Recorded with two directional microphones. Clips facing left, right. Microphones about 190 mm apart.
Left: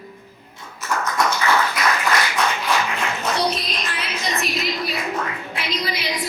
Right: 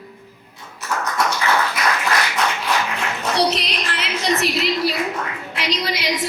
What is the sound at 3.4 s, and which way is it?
Music, 80° right.